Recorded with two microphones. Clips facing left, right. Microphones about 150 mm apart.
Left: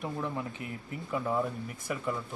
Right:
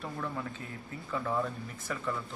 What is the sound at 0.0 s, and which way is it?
Speech, 15° left (ahead or behind).